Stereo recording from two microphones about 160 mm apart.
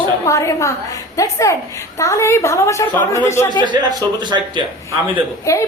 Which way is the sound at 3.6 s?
30° right (ahead or behind).